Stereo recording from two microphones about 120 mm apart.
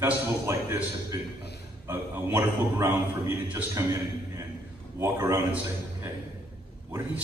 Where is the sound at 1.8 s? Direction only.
20° right (ahead or behind).